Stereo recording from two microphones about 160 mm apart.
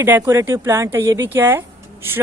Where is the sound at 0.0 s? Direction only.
15° right (ahead or behind).